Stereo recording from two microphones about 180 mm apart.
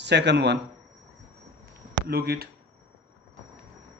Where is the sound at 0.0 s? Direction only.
70° right (ahead or behind).